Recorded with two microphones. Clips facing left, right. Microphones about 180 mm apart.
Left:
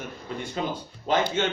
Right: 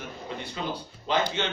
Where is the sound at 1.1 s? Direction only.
45° left (ahead or behind).